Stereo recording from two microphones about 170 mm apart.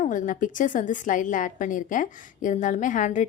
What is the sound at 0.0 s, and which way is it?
A woman's voice, 50° left (ahead or behind).